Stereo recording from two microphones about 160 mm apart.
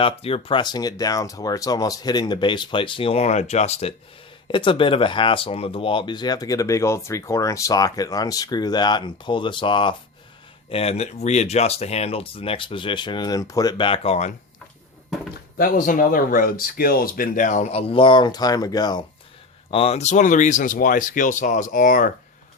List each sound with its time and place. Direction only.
0.0 s speech: 35° left (ahead or behind)
15.5 s speech: 60° left (ahead or behind); by 19.0 s 25° left (ahead or behind)
19.7 s speech: 40° left (ahead or behind); by 22.1 s 55° left (ahead or behind)